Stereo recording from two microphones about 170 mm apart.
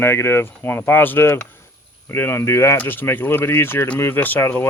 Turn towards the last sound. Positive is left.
turn(degrees=10)  # may be behind; listen again after turning